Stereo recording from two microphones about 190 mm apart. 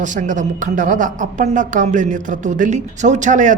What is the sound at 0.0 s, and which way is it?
A woman's voice, 40° right (ahead or behind).